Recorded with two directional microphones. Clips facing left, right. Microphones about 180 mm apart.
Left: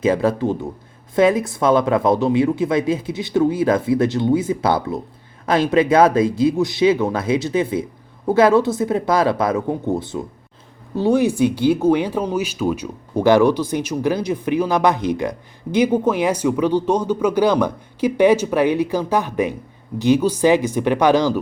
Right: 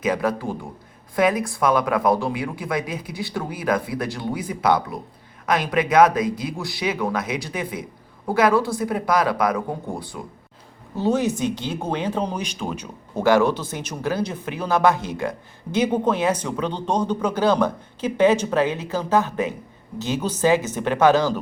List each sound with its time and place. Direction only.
0.0 s speech: 25° left (ahead or behind)
11.0 s speech: 15° left (ahead or behind)